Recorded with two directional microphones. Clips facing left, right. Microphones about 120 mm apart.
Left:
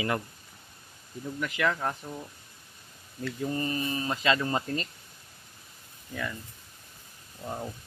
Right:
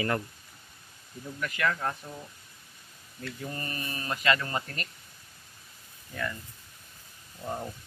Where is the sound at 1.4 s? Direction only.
15° left (ahead or behind).